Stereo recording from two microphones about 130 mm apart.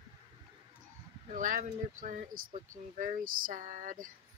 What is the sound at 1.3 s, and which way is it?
Speech, 90° right.